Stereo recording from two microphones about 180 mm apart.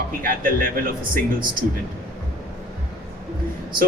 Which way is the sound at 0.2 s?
50° right (ahead or behind).